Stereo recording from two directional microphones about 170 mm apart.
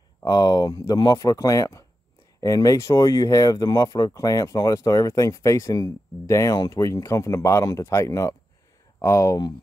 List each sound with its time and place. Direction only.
0.2 s speech: 25° left (ahead or behind)